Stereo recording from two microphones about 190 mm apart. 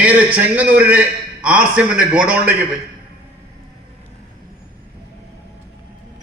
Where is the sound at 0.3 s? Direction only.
10° right (ahead or behind).